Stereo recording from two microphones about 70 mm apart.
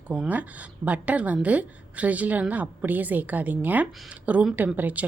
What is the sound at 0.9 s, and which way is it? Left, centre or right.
A woman's voice, right.